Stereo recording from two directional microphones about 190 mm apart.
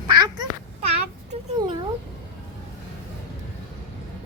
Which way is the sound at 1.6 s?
20° right (ahead or behind).